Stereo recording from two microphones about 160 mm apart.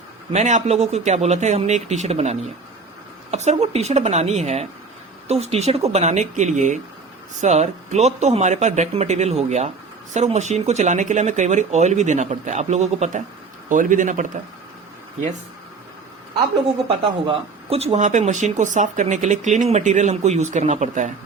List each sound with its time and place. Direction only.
0.3 s speech: 45° right (ahead or behind)
16.6 s speech: 35° right (ahead or behind)